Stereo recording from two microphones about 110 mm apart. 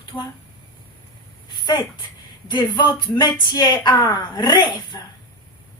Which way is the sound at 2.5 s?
45° left (ahead or behind).